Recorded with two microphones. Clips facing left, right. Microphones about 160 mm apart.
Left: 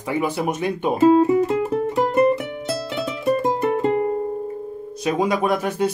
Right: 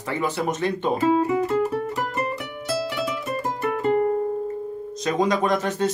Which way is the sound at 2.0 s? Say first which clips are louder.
Left 10 dB; 30° left (ahead or behind).